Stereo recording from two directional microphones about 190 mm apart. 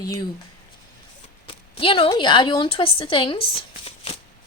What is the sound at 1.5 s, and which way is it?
A woman's voice, 25° left (ahead or behind).